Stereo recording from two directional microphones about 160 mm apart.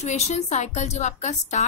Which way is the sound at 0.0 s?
45° left (ahead or behind).